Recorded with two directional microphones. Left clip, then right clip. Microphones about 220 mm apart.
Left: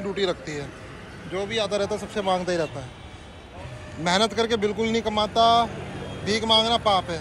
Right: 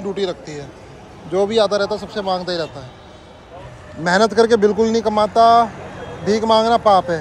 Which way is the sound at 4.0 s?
50° right (ahead or behind).